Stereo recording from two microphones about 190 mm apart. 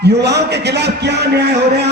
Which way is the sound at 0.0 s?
60° right (ahead or behind).